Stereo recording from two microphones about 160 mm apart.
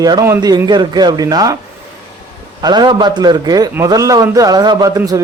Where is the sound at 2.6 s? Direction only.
25° right (ahead or behind).